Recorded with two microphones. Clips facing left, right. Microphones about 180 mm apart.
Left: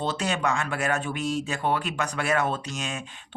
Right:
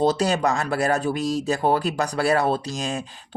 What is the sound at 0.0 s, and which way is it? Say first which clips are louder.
Speech: right 7 dB; 40° right (ahead or behind).